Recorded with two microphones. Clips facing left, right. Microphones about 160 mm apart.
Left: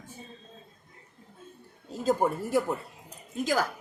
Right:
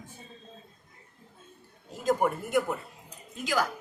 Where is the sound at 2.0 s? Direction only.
30° left (ahead or behind).